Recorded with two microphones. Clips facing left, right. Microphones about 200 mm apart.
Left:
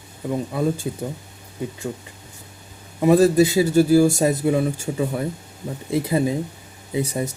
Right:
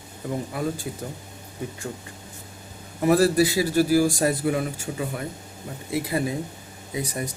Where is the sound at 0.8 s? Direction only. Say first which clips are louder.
Left 5 dB; 25° left (ahead or behind).